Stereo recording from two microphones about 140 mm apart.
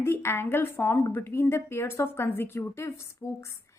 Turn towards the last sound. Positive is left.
turn(degrees=15)  # may be behind; listen again after turning